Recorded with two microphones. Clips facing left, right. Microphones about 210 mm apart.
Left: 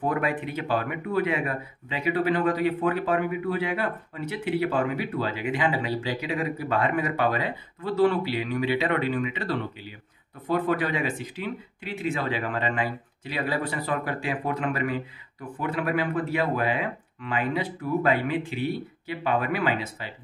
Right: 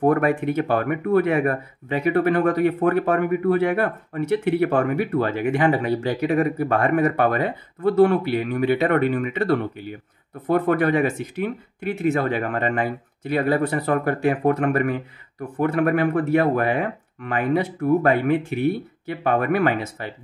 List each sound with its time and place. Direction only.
0.0 s speech: 50° right (ahead or behind)
15.5 s speech: 45° right (ahead or behind)